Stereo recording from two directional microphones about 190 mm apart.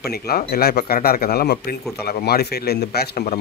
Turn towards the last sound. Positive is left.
turn(degrees=55)  # may be behind; listen again after turning